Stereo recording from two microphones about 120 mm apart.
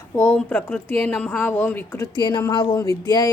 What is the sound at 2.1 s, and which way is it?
Speech, 35° left (ahead or behind).